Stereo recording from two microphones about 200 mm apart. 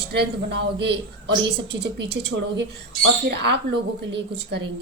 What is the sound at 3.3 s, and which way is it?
A man's voice, 55° right (ahead or behind).